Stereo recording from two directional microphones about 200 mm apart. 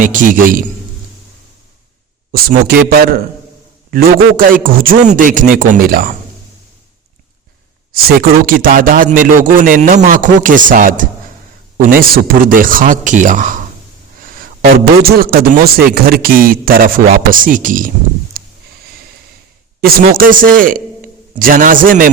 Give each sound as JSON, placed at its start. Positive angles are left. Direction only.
{"t": 0.0, "sound": "a man's voice", "side_deg": -40}
{"t": 2.3, "sound": "a man's voice", "side_deg": -50}
{"t": 7.9, "sound": "a man's voice", "side_deg": -50}
{"t": 19.8, "sound": "a man's voice", "side_deg": -45}